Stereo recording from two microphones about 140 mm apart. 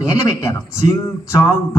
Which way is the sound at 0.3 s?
20° left (ahead or behind).